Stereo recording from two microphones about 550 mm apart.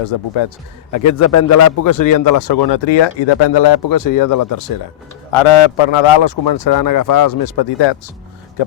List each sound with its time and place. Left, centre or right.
0.0 s speech: left
0.9 s a man's voice: left
5.3 s a man's voice: left